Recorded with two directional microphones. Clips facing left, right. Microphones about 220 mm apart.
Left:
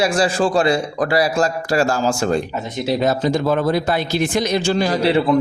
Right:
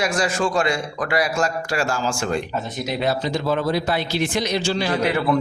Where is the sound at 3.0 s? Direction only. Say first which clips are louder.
Left 4 dB; 50° left (ahead or behind); by 5.2 s 35° left (ahead or behind).